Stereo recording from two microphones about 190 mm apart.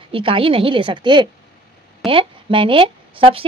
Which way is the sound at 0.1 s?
30° right (ahead or behind).